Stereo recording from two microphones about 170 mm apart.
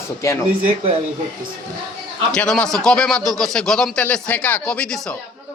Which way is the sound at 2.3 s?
5° left (ahead or behind).